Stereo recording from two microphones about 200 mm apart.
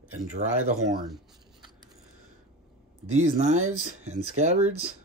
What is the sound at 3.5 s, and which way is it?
Speech, 90° right.